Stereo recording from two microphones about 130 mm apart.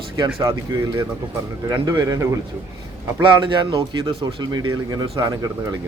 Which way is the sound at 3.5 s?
40° right (ahead or behind).